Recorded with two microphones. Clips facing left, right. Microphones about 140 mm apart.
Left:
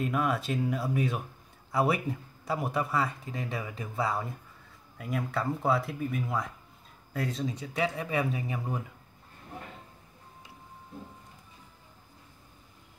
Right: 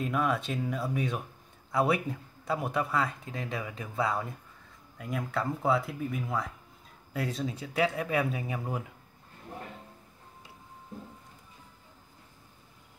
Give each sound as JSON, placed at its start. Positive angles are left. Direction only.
{"t": 0.0, "sound": "speech", "side_deg": 0}